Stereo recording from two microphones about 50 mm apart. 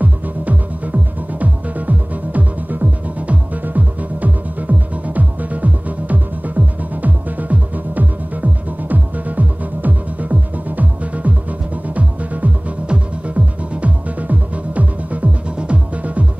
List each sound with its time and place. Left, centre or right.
0.0 s music: right